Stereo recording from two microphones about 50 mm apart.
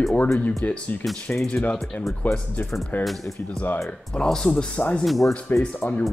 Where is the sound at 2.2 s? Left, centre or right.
Left.